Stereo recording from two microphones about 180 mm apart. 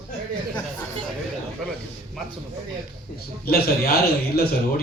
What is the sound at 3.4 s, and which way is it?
Speech, 60° left (ahead or behind).